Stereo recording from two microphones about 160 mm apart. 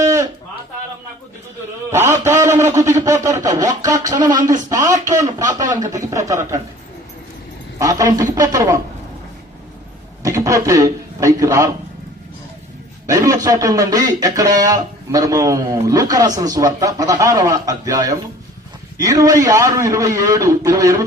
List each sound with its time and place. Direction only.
0.0 s a sound: 20° right (ahead or behind)
2.2 s a man's voice: 15° right (ahead or behind)
7.8 s a man's voice: 20° right (ahead or behind)
10.2 s a man's voice: 20° right (ahead or behind)
13.1 s a man's voice: 20° right (ahead or behind)